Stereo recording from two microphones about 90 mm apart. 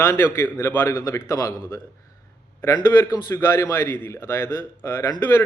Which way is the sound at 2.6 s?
45° left (ahead or behind).